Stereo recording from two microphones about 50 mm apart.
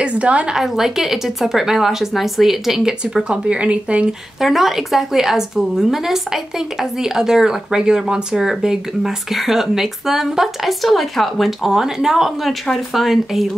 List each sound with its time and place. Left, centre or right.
0.0 s speech: right
0.6 s a woman's voice: centre
3.3 s speech: right
4.4 s a woman's voice: centre